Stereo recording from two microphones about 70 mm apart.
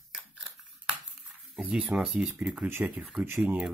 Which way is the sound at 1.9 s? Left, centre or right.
Centre.